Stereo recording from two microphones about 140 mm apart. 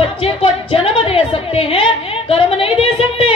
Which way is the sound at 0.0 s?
40° left (ahead or behind).